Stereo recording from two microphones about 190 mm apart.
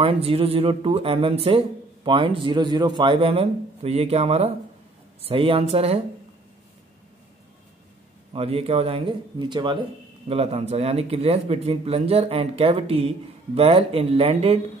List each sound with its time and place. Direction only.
0.0 s speech: 30° right (ahead or behind)
8.3 s speech: 30° right (ahead or behind)